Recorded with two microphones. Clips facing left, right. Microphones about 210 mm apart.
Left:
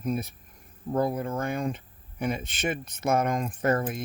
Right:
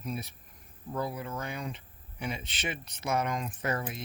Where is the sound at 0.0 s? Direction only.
50° left (ahead or behind).